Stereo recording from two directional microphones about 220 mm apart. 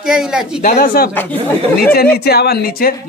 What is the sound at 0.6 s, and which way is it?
Speech, 40° left (ahead or behind).